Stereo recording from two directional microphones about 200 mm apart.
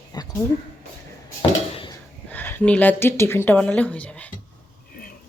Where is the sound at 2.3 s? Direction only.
10° left (ahead or behind).